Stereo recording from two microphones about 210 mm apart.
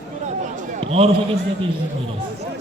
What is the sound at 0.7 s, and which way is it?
Basketball bounce, 30° right (ahead or behind).